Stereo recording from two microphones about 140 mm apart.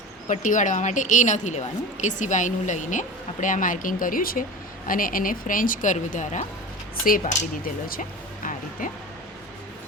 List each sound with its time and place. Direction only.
0.3 s a woman's voice: 65° left (ahead or behind)
7.0 s speech: 90° left
8.8 s speech: 75° left (ahead or behind)